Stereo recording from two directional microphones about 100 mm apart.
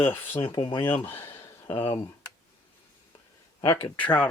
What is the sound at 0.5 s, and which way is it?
Speech, 50° left (ahead or behind).